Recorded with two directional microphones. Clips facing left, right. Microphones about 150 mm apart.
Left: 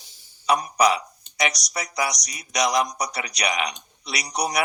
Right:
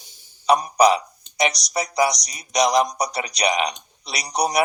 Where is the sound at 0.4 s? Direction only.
30° right (ahead or behind).